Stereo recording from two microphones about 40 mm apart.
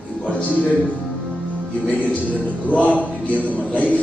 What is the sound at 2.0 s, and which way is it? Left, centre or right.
Speech, left.